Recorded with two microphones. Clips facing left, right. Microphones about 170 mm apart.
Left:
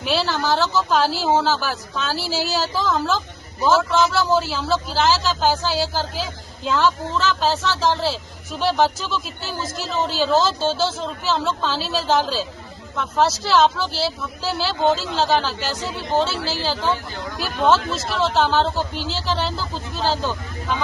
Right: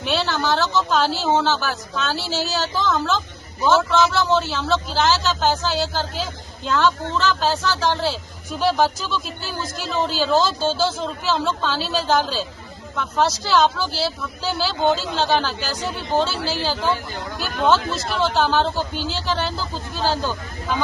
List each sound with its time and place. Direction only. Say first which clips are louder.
0.0 s a man's voice: even; 5° left (ahead or behind)